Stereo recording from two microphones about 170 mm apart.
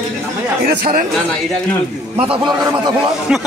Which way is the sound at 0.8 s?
55° right (ahead or behind).